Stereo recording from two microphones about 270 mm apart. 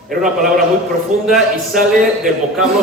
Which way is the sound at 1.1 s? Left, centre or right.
Right.